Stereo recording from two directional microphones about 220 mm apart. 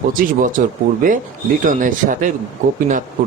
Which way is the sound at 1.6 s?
35° right (ahead or behind).